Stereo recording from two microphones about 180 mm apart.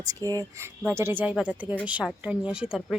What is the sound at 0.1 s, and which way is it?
Speech, 20° right (ahead or behind).